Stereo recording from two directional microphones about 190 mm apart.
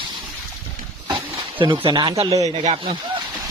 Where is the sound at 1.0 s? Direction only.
25° right (ahead or behind).